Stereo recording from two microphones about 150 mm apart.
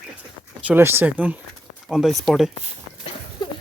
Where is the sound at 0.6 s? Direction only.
15° right (ahead or behind).